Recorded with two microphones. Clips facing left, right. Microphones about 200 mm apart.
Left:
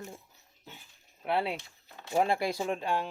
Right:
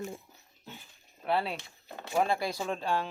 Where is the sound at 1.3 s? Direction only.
20° left (ahead or behind).